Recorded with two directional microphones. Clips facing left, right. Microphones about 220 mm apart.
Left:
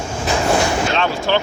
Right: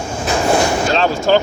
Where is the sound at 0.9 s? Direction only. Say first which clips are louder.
Right 4 dB; 40° right (ahead or behind).